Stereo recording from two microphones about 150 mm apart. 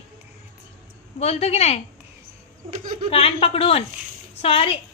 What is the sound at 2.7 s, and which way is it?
Speech, 65° right (ahead or behind).